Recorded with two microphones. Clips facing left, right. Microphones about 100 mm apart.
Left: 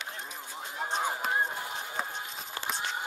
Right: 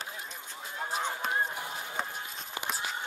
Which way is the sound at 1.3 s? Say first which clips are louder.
Left 1 dB; 25° left (ahead or behind).